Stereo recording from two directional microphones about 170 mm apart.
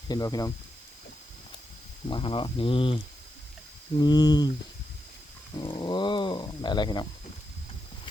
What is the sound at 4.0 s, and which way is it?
Speech, 25° left (ahead or behind).